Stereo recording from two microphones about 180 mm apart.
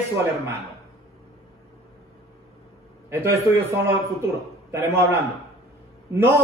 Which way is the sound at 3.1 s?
15° right (ahead or behind).